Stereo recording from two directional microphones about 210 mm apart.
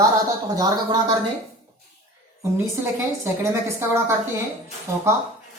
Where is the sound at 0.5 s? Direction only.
15° right (ahead or behind).